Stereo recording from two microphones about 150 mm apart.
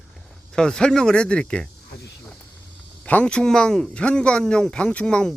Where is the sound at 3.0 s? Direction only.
10° left (ahead or behind).